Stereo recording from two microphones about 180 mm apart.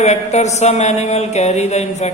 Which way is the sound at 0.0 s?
40° left (ahead or behind).